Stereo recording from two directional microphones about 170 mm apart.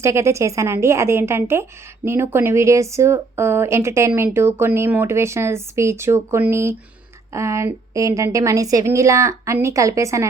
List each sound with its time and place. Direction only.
0.0 s speech: 15° right (ahead or behind)